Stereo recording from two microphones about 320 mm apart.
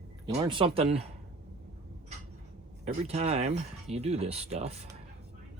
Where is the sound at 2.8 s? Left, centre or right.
Centre.